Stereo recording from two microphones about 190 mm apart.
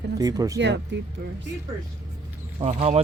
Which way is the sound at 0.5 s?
65° right (ahead or behind).